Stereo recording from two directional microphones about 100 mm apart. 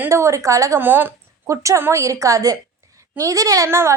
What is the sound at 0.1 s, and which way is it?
Speech, 30° right (ahead or behind).